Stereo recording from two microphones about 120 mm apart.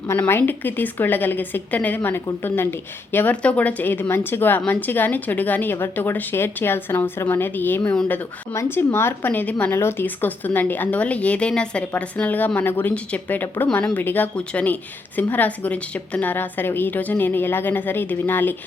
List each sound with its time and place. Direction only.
0.1 s a woman's voice: 20° left (ahead or behind)